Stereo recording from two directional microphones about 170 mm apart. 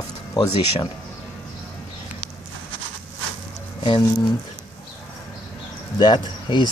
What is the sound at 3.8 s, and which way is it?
Speech, 25° left (ahead or behind).